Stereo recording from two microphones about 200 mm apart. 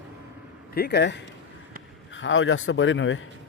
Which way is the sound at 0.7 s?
55° left (ahead or behind).